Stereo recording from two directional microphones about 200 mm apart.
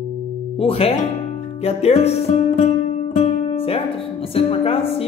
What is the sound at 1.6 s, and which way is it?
Music, 30° left (ahead or behind).